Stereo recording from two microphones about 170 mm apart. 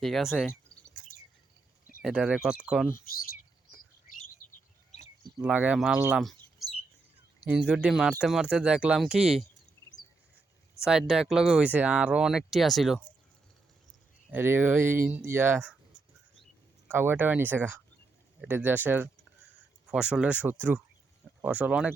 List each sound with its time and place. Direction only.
0.0 s speech: centre (ahead or behind)
0.4 s a sound: 5° left (ahead or behind)
2.0 s speech: centre (ahead or behind)
4.0 s bird: 50° left (ahead or behind)
5.4 s speech: 10° right (ahead or behind)
6.0 s chirp: 5° right (ahead or behind)
7.4 s speech: 10° right (ahead or behind)
10.8 s speech: 5° right (ahead or behind)
14.3 s speech: 10° right (ahead or behind)